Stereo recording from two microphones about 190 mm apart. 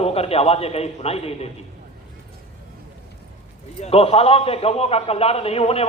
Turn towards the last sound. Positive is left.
turn(degrees=30)  # may be behind; listen again after turning